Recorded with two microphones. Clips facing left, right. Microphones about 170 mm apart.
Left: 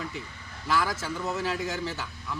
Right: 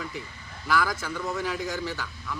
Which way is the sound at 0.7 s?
25° left (ahead or behind).